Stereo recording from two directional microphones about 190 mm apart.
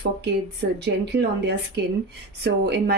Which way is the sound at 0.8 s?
60° right (ahead or behind).